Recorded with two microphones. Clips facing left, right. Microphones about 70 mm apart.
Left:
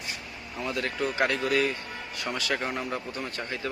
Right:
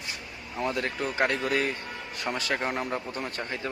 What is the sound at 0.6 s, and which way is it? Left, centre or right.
Speech, right.